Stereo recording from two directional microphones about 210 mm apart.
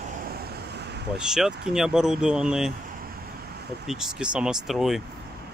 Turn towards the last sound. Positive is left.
turn(degrees=0)  # may be behind; listen again after turning